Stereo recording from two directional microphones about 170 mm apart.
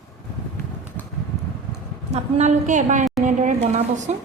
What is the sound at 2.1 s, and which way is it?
A woman's voice, 40° right (ahead or behind).